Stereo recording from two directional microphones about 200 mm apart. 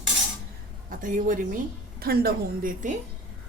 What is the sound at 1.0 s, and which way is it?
A woman's voice, 40° right (ahead or behind).